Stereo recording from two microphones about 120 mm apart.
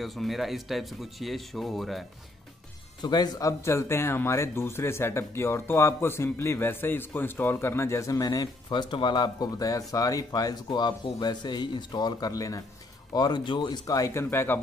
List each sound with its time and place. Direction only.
0.0 s speech: centre (ahead or behind)
3.0 s speech: 35° left (ahead or behind)